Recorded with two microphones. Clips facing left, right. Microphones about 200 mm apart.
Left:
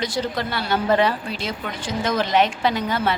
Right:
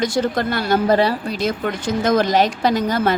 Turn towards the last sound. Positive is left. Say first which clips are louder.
# right 4 dB
turn(degrees=-40)  # may be behind; listen again after turning